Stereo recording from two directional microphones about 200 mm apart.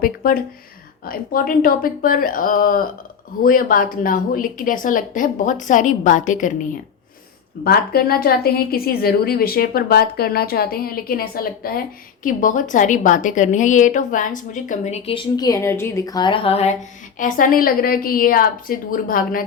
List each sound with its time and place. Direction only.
0.0 s a woman's voice: 45° left (ahead or behind)
7.6 s a woman's voice: 50° left (ahead or behind); by 16.7 s 30° left (ahead or behind)
17.2 s a woman's voice: 40° left (ahead or behind)